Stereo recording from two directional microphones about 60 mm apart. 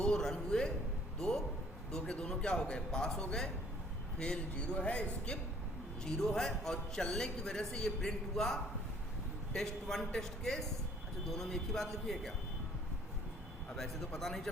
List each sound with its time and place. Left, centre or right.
0.0 s a man's voice: centre
13.7 s a man's voice: centre